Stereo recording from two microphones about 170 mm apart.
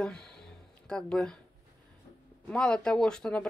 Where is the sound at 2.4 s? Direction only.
5° left (ahead or behind).